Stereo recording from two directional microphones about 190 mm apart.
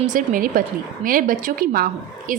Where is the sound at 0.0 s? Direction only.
45° right (ahead or behind).